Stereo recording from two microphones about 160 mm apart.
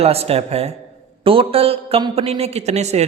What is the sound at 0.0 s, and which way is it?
A woman's voice, 40° right (ahead or behind).